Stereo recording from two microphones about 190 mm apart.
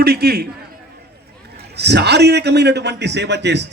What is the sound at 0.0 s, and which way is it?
Speech, 55° right (ahead or behind).